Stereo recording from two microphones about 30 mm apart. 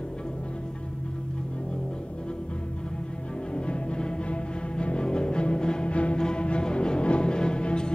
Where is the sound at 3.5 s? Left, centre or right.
Left.